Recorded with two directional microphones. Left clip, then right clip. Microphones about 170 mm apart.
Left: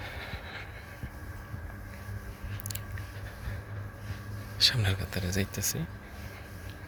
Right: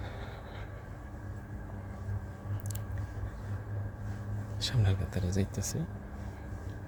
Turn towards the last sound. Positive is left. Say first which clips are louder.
# left 4 dB
turn(degrees=-5)  # may be behind; listen again after turning